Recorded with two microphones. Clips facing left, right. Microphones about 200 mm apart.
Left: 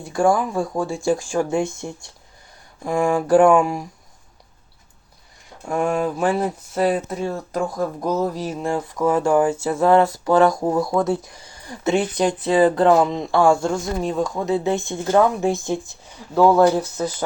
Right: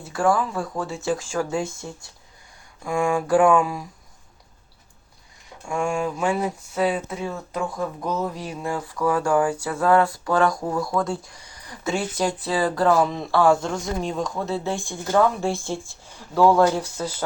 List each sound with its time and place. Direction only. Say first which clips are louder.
0.3 s speech: left 4 dB; 25° left (ahead or behind)
2.8 s speech: left 3 dB; 35° left (ahead or behind)
5.6 s speech: left 4 dB; 35° left (ahead or behind)
8.6 s speech: left 3 dB; 20° left (ahead or behind); by 14.3 s 5° left (ahead or behind)
14.3 s speech: left 5 dB; 15° left (ahead or behind)